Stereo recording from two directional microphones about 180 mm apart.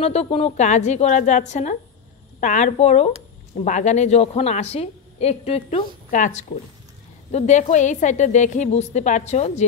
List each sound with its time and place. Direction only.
0.0 s a woman's voice: 35° left (ahead or behind)